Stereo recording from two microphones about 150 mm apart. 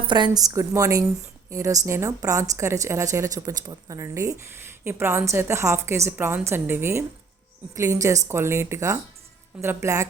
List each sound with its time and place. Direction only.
0.1 s a woman's voice: 30° right (ahead or behind)